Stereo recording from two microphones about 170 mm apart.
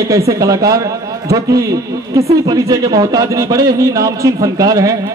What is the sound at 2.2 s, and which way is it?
A man's voice, 20° right (ahead or behind).